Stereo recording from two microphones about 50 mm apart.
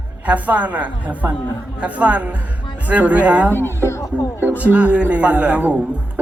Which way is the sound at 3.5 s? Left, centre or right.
Left.